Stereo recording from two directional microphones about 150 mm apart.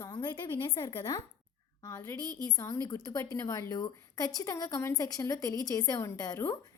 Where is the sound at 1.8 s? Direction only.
20° left (ahead or behind).